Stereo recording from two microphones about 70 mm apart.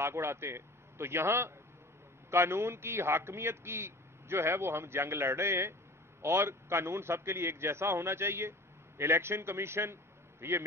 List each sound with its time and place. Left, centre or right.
0.0 s a man's voice: right